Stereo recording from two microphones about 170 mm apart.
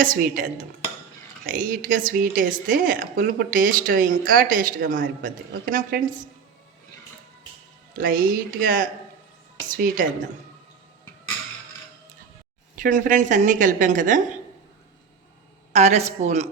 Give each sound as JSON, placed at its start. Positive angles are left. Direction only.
{"t": 0.0, "sound": "a woman's voice", "side_deg": -55}
{"t": 7.9, "sound": "a woman's voice", "side_deg": -55}
{"t": 12.7, "sound": "speech", "side_deg": -50}
{"t": 15.7, "sound": "speech", "side_deg": -40}